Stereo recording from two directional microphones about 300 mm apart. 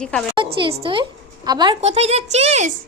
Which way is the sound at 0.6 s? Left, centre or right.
Centre.